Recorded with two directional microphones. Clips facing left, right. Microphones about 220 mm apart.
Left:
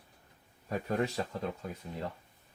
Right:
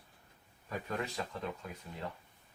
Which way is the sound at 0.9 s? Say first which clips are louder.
Left 7 dB; 40° left (ahead or behind).